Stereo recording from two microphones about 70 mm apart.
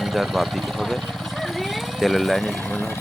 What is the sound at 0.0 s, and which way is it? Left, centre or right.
Speech, centre.